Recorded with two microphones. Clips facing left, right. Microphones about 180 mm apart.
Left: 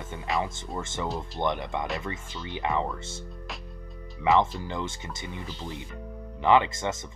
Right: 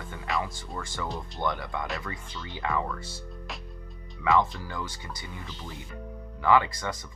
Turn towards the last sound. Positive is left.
turn(degrees=20)  # may be behind; listen again after turning